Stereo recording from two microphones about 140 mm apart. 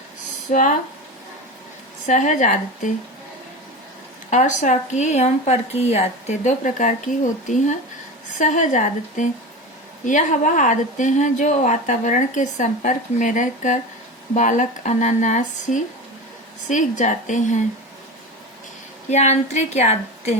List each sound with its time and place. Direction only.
0.5 s speech: 65° left (ahead or behind)
2.0 s speech: 60° left (ahead or behind)
4.3 s speech: 60° left (ahead or behind)
19.1 s a woman's voice: 55° left (ahead or behind)